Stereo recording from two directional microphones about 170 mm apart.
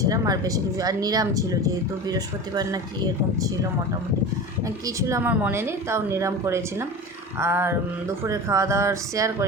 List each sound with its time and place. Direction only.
0.0 s speech: 20° right (ahead or behind)
4.9 s a woman's voice: 15° right (ahead or behind)